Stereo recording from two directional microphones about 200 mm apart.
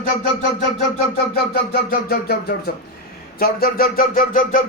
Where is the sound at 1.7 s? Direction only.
50° left (ahead or behind).